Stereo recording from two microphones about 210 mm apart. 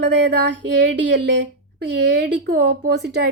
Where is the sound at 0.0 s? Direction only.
55° right (ahead or behind).